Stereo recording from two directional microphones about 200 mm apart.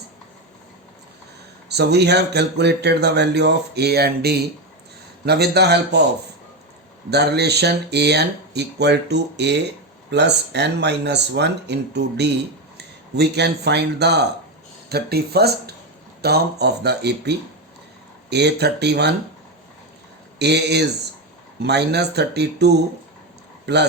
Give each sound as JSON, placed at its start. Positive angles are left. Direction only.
{"t": 1.7, "sound": "speech", "side_deg": -55}
{"t": 7.1, "sound": "speech", "side_deg": -55}
{"t": 20.4, "sound": "speech", "side_deg": -55}